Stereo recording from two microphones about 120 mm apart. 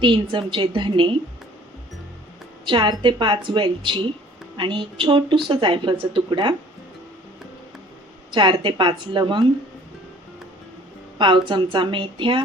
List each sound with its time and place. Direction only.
0.0 s a woman's voice: 45° right (ahead or behind)
2.6 s a woman's voice: 40° right (ahead or behind)
8.3 s a woman's voice: 40° right (ahead or behind)
11.2 s a woman's voice: 40° right (ahead or behind)